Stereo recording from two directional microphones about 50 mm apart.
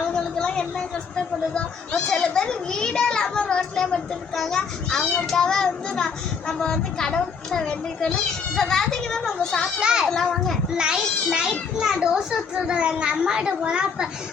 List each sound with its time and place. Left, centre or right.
0.1 s speech: centre
4.4 s a child's voice: centre
9.8 s a child's voice: centre
10.1 s a child's voice: centre
10.8 s a child's voice: centre